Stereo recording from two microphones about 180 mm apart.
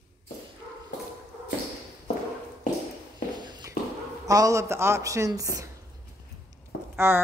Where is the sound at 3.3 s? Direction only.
25° right (ahead or behind).